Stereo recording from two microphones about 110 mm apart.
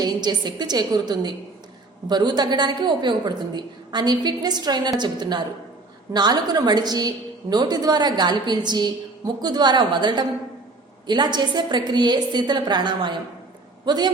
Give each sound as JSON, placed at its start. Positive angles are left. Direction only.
{"t": 0.0, "sound": "a woman's voice", "side_deg": -40}